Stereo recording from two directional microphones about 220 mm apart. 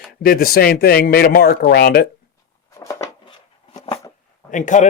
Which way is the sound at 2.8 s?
15° left (ahead or behind).